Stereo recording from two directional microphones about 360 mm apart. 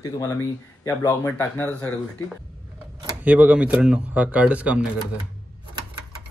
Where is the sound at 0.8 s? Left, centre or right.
Centre.